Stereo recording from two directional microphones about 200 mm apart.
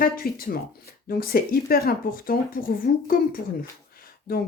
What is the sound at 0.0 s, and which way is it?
Speech, 45° left (ahead or behind).